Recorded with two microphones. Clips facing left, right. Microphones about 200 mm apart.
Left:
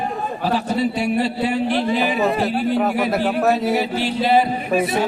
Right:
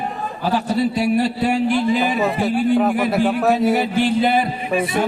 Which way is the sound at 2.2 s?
Centre (ahead or behind).